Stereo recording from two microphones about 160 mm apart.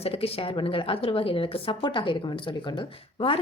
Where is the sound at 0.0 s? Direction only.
40° left (ahead or behind).